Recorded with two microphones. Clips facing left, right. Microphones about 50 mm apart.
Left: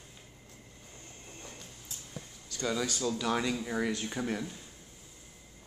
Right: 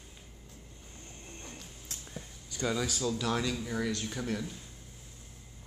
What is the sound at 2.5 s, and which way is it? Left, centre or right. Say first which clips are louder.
Speech: even; centre.